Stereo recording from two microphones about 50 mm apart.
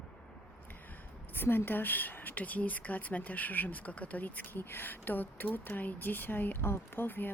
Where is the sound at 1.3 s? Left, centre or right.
Left.